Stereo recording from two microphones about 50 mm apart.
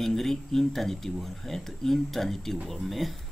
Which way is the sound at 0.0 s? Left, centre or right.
Centre.